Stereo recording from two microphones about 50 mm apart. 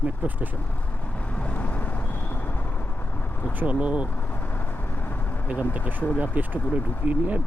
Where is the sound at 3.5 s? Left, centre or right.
Right.